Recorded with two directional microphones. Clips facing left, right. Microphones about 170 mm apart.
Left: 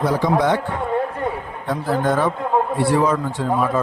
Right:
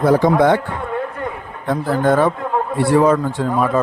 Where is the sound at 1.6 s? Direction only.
50° right (ahead or behind).